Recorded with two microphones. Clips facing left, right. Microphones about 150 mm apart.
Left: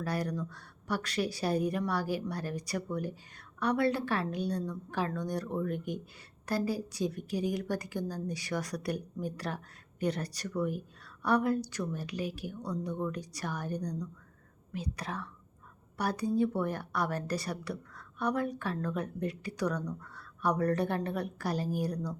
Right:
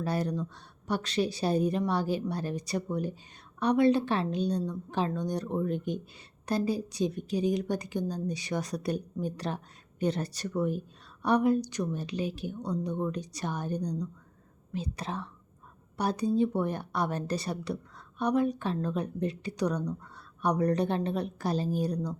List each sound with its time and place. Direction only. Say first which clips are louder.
0.0 s a woman's voice: right 3 dB; 25° right (ahead or behind)